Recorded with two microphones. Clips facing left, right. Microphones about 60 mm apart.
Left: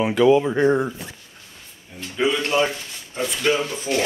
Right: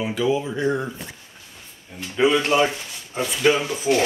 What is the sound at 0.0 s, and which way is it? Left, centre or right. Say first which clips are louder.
Speech: left 6 dB; left.